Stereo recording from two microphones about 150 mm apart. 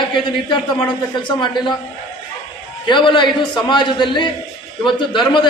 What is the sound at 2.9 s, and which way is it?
A man's voice, 30° left (ahead or behind).